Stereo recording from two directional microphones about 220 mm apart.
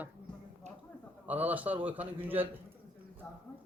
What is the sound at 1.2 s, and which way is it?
A man's voice, 5° right (ahead or behind).